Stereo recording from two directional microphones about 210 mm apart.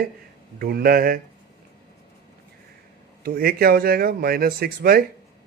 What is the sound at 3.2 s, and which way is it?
Speech, 45° right (ahead or behind).